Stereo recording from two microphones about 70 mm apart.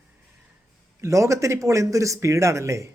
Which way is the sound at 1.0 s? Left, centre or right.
Right.